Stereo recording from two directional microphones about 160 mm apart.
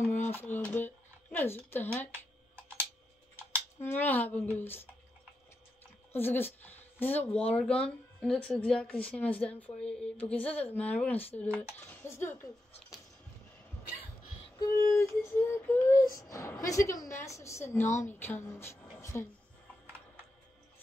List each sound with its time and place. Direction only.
0.0 s speech: 10° left (ahead or behind)
3.8 s speech: 10° left (ahead or behind)
6.1 s speech: 15° left (ahead or behind)
14.6 s speech: 15° left (ahead or behind)